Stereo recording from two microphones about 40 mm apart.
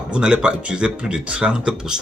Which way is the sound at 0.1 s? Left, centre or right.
Right.